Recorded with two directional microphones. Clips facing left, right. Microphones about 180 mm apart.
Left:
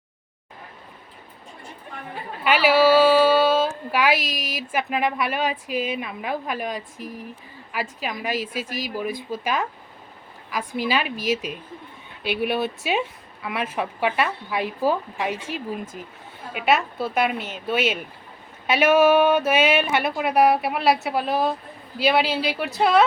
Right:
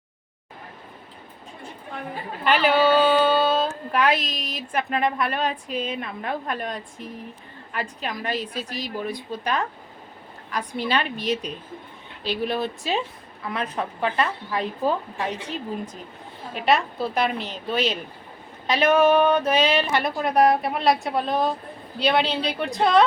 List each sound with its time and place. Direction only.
2.4 s speech: 5° left (ahead or behind)
10.8 s speech: 5° left (ahead or behind)
12.2 s speech: 60° left (ahead or behind)
12.5 s a woman's voice: 5° left (ahead or behind)